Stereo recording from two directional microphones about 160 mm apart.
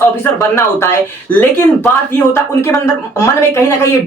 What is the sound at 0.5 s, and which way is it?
Speech, 15° left (ahead or behind).